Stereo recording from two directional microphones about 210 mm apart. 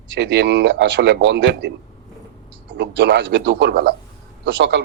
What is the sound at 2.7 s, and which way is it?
A man's voice, 60° right (ahead or behind).